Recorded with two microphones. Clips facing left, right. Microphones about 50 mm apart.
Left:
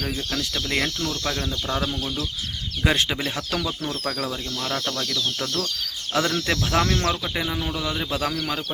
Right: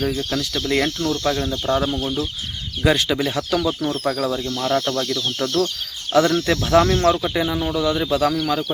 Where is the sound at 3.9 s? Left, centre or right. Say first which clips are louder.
Right 6 dB; centre.